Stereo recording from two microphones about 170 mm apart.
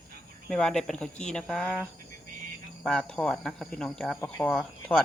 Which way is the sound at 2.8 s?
5° left (ahead or behind).